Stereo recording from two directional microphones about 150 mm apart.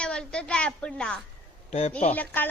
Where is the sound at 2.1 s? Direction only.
10° left (ahead or behind).